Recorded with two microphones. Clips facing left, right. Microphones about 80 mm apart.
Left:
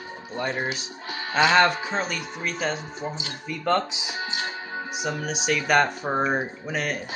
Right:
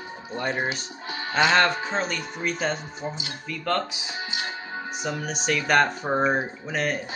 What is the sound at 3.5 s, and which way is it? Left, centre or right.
Speech, centre.